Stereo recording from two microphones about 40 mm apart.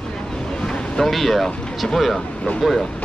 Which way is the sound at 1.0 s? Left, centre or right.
Centre.